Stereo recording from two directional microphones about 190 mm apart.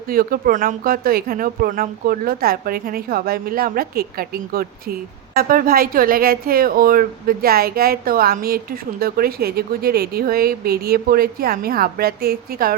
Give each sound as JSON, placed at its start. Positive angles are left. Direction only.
{"t": 0.1, "sound": "speech", "side_deg": -50}